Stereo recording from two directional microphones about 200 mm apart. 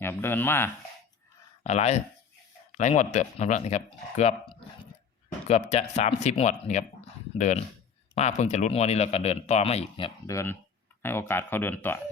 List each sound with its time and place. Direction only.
0.0 s speech: 10° left (ahead or behind)
1.6 s speech: 35° left (ahead or behind)
5.5 s speech: 30° left (ahead or behind)
10.2 s speech: 15° left (ahead or behind)